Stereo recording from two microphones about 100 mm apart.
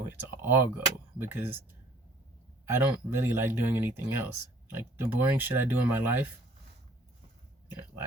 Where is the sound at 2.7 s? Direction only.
25° right (ahead or behind).